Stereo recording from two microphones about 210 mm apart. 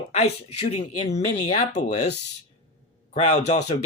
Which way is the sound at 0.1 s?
30° left (ahead or behind).